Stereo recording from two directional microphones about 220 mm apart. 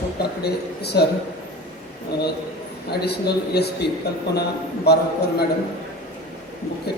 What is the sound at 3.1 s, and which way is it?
Speech, 45° left (ahead or behind).